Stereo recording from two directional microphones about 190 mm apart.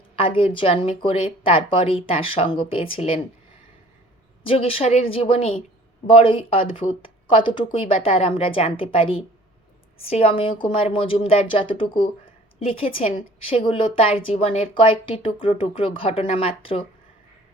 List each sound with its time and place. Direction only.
0.2 s speech: 30° left (ahead or behind)
4.4 s a woman's voice: 30° left (ahead or behind)